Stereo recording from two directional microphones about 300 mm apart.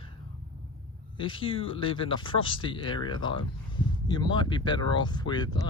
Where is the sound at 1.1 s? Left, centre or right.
Centre.